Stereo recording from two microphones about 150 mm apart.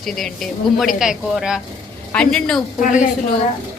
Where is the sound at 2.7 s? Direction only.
60° left (ahead or behind).